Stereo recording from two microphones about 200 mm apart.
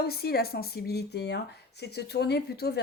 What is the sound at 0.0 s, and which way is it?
Speech, 50° left (ahead or behind).